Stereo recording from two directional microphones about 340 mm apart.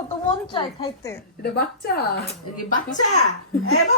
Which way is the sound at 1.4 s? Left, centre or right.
Left.